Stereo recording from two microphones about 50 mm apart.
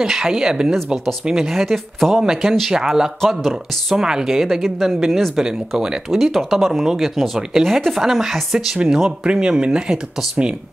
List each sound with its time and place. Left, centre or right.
0.0 s speech: centre